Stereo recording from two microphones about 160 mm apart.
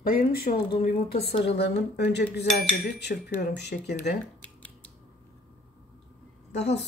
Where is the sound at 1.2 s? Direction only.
90° left.